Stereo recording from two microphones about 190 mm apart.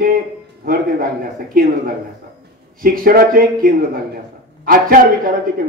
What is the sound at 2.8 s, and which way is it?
Speech, 50° right (ahead or behind).